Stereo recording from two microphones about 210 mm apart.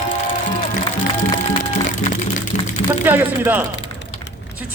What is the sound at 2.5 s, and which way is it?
Music, 35° left (ahead or behind).